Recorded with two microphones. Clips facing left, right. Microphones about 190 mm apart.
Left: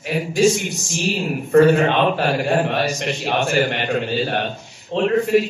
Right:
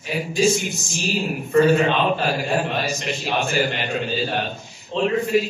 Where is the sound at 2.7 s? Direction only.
65° left (ahead or behind).